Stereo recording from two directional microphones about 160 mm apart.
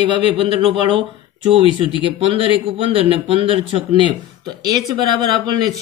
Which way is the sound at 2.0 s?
35° right (ahead or behind).